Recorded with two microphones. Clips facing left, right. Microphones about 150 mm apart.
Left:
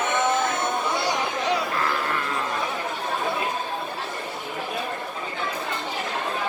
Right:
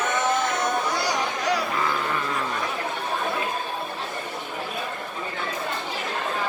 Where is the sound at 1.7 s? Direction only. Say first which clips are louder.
Even; centre (ahead or behind).